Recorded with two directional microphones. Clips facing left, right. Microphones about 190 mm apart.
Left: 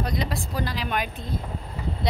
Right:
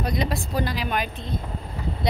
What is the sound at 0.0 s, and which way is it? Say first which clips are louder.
Speech: right 2 dB; 20° right (ahead or behind).